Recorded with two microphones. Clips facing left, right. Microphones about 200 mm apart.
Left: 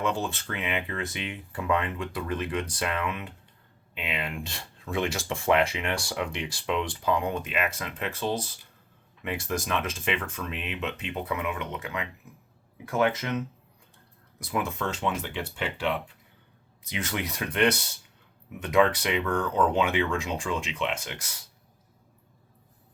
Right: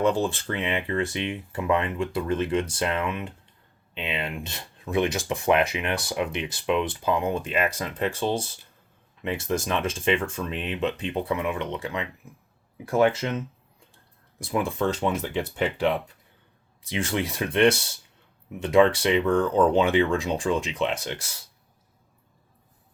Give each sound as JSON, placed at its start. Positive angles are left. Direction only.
{"t": 0.0, "sound": "speech", "side_deg": -30}
{"t": 16.8, "sound": "speech", "side_deg": -30}